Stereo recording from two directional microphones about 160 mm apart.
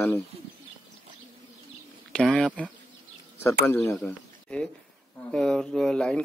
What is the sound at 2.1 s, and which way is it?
Speech, 5° left (ahead or behind).